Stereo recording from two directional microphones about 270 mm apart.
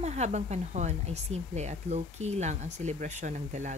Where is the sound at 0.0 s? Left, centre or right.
Right.